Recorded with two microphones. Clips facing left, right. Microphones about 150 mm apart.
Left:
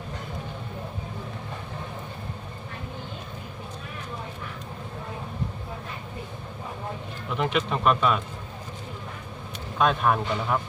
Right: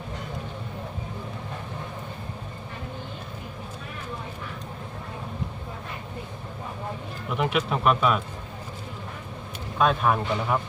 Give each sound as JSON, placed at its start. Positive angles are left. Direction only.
{"t": 7.3, "sound": "speech", "side_deg": -5}
{"t": 9.7, "sound": "speech", "side_deg": 0}